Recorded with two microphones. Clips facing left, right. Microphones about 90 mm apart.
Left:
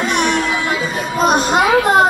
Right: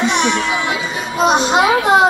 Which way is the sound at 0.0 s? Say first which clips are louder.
Even; 45° left (ahead or behind).